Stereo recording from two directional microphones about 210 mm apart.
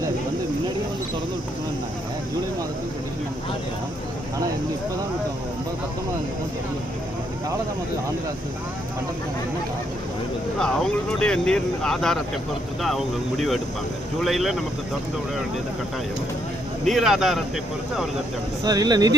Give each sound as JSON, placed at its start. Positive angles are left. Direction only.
{"t": 10.6, "sound": "speech", "side_deg": 5}
{"t": 16.8, "sound": "speech", "side_deg": 0}
{"t": 18.6, "sound": "speech", "side_deg": -20}